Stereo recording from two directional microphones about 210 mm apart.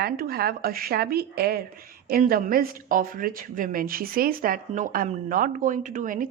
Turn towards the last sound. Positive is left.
turn(degrees=-40)  # may be behind; listen again after turning